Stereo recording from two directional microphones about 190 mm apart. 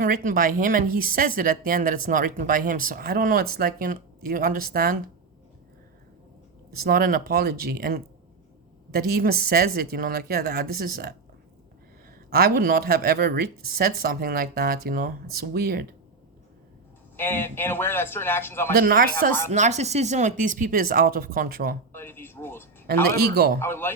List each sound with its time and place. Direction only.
0.0 s speech: 45° right (ahead or behind)
6.8 s speech: 50° right (ahead or behind)
12.3 s speech: 50° right (ahead or behind)
17.2 s a man's voice: 10° left (ahead or behind)
18.8 s speech: 50° right (ahead or behind)
19.5 s speech: 35° right (ahead or behind)
21.9 s a man's voice: 10° left (ahead or behind)
23.0 s speech: 55° right (ahead or behind)
23.6 s a man's voice: 10° left (ahead or behind)